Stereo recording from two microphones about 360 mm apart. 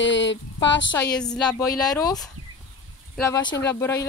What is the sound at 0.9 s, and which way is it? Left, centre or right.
Speech, centre.